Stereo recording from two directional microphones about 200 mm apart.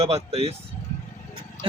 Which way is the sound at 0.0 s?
30° right (ahead or behind).